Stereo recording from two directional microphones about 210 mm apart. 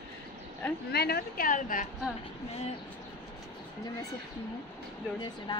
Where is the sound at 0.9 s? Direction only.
50° left (ahead or behind).